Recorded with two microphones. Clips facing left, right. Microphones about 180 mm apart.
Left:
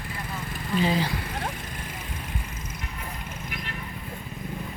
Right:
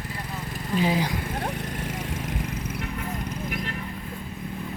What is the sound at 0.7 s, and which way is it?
Speech, 10° right (ahead or behind).